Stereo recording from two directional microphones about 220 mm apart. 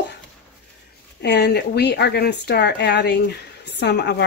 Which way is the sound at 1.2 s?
50° left (ahead or behind).